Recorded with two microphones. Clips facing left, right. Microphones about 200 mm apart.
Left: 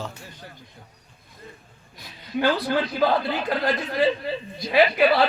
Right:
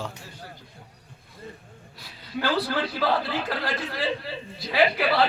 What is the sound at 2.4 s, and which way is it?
Speech, 20° left (ahead or behind).